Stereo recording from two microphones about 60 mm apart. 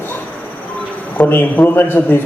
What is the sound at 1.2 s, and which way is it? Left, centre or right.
A man's voice, left.